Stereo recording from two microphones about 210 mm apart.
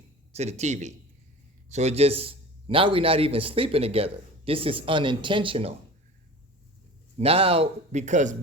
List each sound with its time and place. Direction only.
0.3 s a man's voice: 30° right (ahead or behind)
7.2 s a man's voice: 25° right (ahead or behind)